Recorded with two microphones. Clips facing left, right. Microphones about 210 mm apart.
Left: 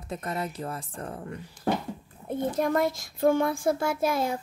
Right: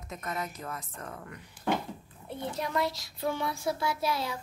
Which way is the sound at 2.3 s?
50° left (ahead or behind).